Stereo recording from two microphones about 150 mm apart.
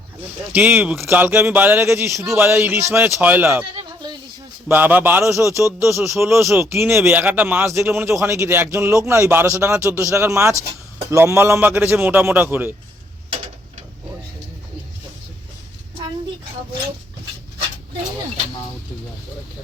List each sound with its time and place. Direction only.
0.5 s speech: 10° right (ahead or behind)
4.7 s speech: 10° right (ahead or behind)